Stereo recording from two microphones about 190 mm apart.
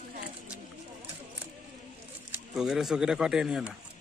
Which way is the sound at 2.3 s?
5° right (ahead or behind).